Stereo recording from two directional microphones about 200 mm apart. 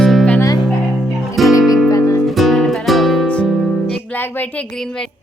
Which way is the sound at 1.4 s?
Centre (ahead or behind).